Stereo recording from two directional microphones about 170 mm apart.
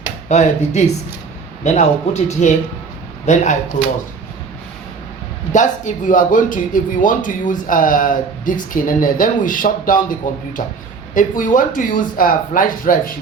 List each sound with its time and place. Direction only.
0.3 s speech: 40° left (ahead or behind)
5.5 s speech: 45° left (ahead or behind)